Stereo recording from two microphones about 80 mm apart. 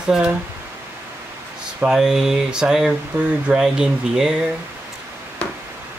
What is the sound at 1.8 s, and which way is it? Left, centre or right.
Speech, centre.